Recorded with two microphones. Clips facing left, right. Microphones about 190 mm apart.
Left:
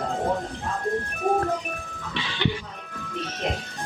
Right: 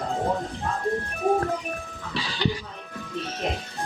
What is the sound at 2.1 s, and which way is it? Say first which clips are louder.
Music: even; 35° right (ahead or behind).